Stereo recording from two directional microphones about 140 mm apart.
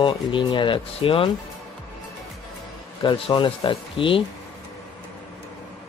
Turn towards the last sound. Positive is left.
turn(degrees=40)  # may be behind; listen again after turning